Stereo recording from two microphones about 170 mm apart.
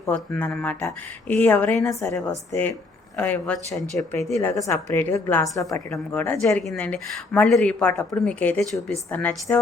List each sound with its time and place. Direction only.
0.1 s a woman's voice: 5° left (ahead or behind)
1.8 s a woman's voice: 20° left (ahead or behind)
2.0 s a woman's voice: 5° left (ahead or behind)